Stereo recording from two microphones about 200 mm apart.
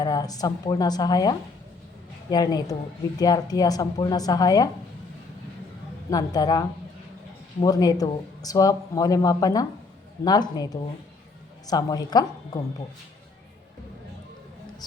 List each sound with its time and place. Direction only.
0.0 s a woman's voice: 20° left (ahead or behind)
6.1 s a woman's voice: 20° left (ahead or behind)